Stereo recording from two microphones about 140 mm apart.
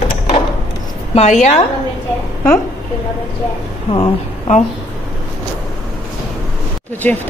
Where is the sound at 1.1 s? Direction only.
55° left (ahead or behind).